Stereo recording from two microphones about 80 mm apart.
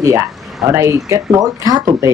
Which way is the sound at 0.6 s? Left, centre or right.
Right.